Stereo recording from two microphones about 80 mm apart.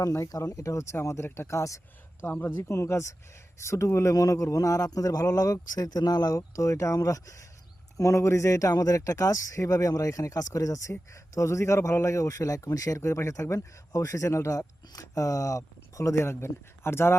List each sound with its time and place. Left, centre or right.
0.0 s a man's voice: left
0.3 s a man's voice: left
2.2 s speech: left
2.6 s a man's voice: left